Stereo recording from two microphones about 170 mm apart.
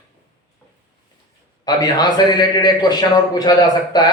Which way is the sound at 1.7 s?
25° left (ahead or behind).